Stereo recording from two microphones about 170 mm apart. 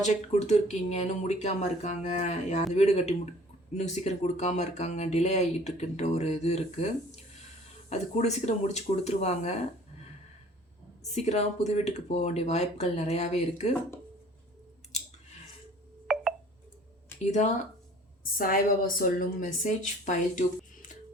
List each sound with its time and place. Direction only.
0.0 s speech: 40° left (ahead or behind)
7.9 s speech: 40° left (ahead or behind)
11.1 s speech: 40° left (ahead or behind)
16.1 s telephone dialing: centre (ahead or behind)
17.2 s speech: 40° left (ahead or behind)
18.3 s speech: 55° left (ahead or behind)